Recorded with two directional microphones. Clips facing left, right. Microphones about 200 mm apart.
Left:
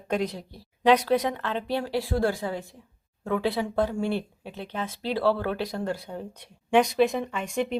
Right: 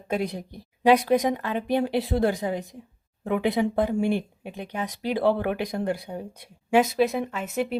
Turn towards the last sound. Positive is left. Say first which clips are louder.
# right 1 dB
turn(degrees=-5)  # may be behind; listen again after turning